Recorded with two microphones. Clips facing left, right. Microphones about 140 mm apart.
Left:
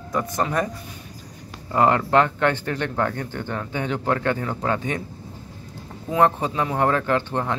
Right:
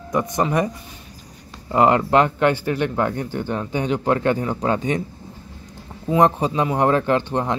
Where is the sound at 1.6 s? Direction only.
20° right (ahead or behind).